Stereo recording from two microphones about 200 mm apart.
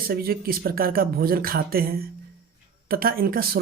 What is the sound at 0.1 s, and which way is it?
Speech, 50° right (ahead or behind).